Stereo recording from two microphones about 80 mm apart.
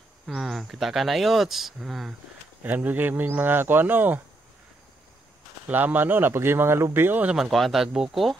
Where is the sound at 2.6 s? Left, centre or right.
Right.